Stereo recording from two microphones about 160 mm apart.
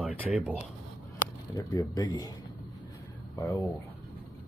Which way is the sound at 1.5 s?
25° left (ahead or behind).